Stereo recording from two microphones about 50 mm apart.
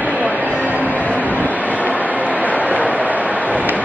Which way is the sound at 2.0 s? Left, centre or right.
Right.